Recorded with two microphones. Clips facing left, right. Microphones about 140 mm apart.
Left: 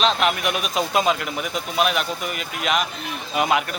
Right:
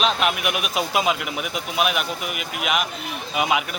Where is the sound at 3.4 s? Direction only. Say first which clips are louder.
Left 1 dB; 5° right (ahead or behind).